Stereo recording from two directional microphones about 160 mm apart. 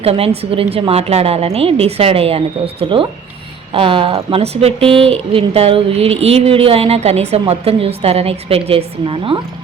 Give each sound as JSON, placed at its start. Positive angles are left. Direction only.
{"t": 0.0, "sound": "speech", "side_deg": -35}
{"t": 3.7, "sound": "speech", "side_deg": -35}